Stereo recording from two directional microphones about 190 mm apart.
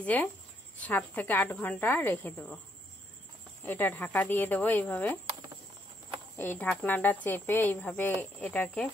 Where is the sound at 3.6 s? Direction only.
10° left (ahead or behind).